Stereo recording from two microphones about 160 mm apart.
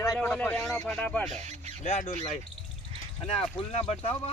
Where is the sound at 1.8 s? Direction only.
45° left (ahead or behind).